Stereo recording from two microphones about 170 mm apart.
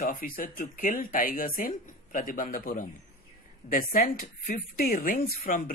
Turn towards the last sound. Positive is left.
turn(degrees=55)  # may be behind; listen again after turning